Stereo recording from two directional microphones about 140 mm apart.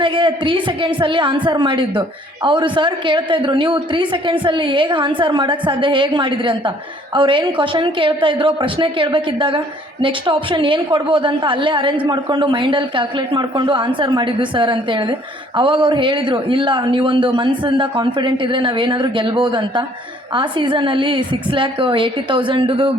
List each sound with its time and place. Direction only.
0.0 s a woman's voice: 35° right (ahead or behind)